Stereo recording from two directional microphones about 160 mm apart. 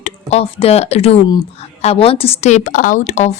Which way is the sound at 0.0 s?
40° left (ahead or behind).